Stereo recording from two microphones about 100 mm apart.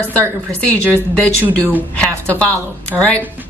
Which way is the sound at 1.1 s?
15° left (ahead or behind).